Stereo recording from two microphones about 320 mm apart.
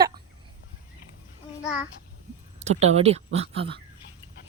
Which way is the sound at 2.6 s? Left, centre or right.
Right.